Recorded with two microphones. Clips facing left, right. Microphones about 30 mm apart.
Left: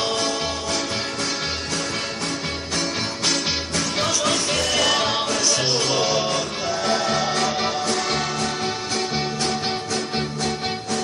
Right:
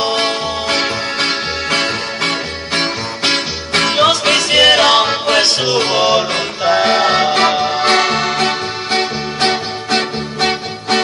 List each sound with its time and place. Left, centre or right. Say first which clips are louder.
0.0 s music: right 7 dB; right
2.7 s music: right 8 dB; right
5.6 s music: right 7 dB; right
7.7 s music: right 10 dB; right